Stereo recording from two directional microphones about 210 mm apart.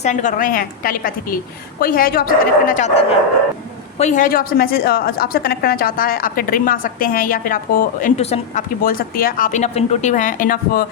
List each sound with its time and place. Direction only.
0.0 s a woman's voice: 35° left (ahead or behind)